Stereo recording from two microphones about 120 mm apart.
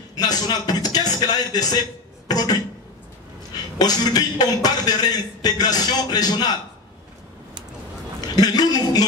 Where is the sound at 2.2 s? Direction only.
35° left (ahead or behind).